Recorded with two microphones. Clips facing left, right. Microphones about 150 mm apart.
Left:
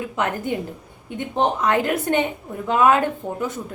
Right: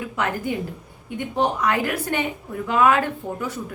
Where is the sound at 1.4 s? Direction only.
20° left (ahead or behind).